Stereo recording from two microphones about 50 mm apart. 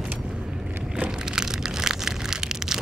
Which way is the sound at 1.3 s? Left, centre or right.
Centre.